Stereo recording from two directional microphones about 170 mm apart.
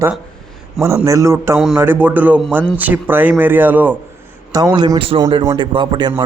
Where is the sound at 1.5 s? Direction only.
Centre (ahead or behind).